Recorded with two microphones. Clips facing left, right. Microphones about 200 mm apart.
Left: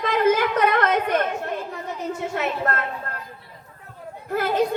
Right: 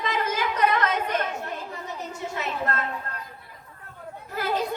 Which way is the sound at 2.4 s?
55° left (ahead or behind).